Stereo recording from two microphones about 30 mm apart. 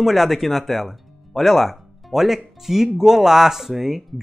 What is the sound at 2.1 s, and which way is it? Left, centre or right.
Speech, centre.